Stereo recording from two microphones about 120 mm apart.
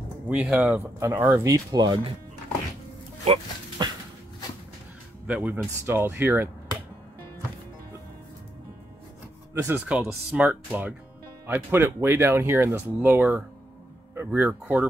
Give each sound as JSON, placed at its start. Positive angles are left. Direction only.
{"t": 0.3, "sound": "speech", "side_deg": -10}
{"t": 1.3, "sound": "speech", "side_deg": -30}
{"t": 3.8, "sound": "a sound", "side_deg": -40}
{"t": 5.2, "sound": "speech", "side_deg": -10}
{"t": 9.5, "sound": "speech", "side_deg": -20}